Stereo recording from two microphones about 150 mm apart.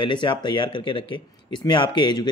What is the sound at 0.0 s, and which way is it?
Speech, 30° left (ahead or behind).